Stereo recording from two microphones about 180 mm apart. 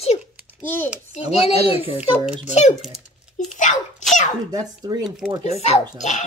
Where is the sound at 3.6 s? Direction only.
45° left (ahead or behind).